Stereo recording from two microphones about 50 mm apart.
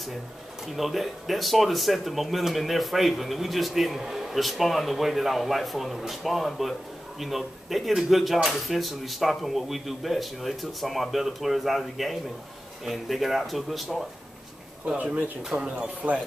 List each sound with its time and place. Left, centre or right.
0.7 s speech: centre
15.5 s speech: right